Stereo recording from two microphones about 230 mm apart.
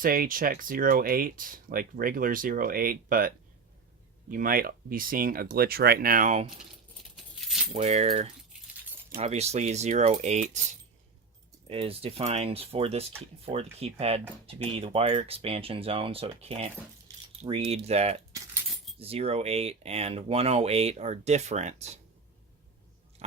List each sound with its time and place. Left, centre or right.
0.0 s speech: right
6.9 s keys jangling: centre
7.7 s speech: right
11.7 s speech: right